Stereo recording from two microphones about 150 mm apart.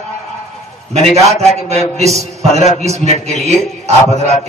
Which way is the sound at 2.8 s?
45° right (ahead or behind).